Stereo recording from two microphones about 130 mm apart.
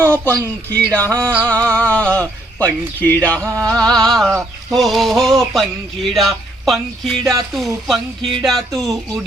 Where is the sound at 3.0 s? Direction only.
10° left (ahead or behind).